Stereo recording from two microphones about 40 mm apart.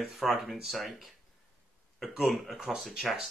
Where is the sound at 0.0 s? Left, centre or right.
Centre.